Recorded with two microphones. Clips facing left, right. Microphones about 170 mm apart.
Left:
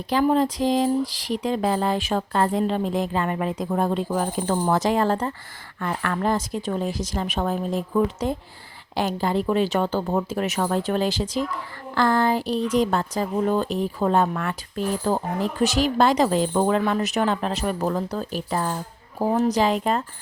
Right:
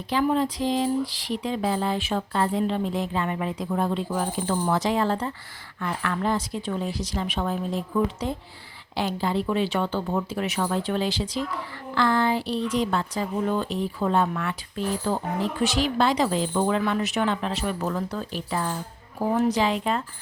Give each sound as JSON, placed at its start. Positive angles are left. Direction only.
{"t": 0.1, "sound": "speech", "side_deg": 40}